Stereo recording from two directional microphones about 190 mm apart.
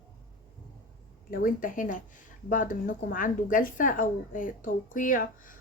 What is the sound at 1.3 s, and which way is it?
Speech, 45° left (ahead or behind).